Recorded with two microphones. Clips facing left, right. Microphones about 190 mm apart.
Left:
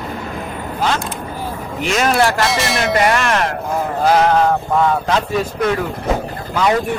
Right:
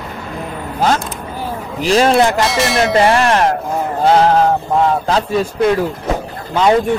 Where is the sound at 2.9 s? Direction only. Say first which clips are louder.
Right 4 dB; 30° right (ahead or behind).